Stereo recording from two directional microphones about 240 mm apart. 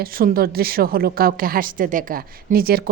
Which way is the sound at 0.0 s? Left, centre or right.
Right.